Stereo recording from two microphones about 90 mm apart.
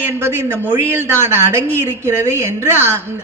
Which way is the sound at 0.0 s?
25° right (ahead or behind).